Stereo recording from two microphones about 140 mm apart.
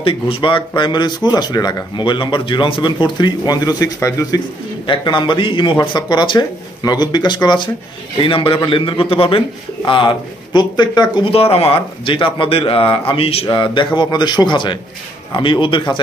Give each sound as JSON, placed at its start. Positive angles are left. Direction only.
{"t": 0.0, "sound": "speech", "side_deg": 40}
{"t": 4.8, "sound": "speech", "side_deg": 35}
{"t": 11.3, "sound": "speech", "side_deg": 45}